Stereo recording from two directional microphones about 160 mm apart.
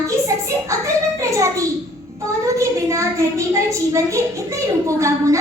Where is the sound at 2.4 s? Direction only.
20° right (ahead or behind).